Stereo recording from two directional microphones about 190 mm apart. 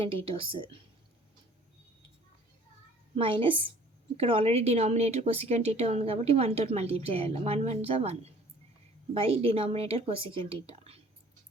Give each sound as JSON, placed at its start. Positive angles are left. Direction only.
{"t": 0.3, "sound": "speech", "side_deg": -30}
{"t": 3.2, "sound": "a woman's voice", "side_deg": -30}